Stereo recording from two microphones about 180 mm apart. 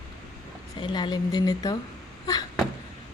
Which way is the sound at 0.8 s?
25° left (ahead or behind).